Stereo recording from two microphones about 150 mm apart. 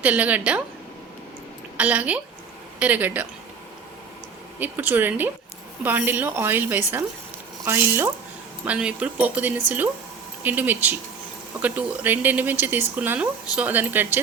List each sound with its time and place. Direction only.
0.0 s speech: 10° right (ahead or behind)
1.7 s speech: 10° right (ahead or behind)
4.6 s speech: 10° right (ahead or behind)